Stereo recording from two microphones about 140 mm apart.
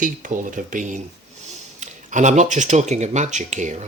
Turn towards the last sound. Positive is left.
turn(degrees=-55)  # may be behind; listen again after turning